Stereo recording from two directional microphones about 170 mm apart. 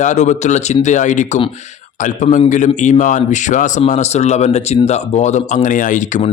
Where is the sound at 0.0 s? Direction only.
45° left (ahead or behind).